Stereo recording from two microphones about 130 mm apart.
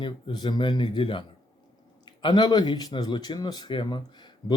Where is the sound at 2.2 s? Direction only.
35° left (ahead or behind).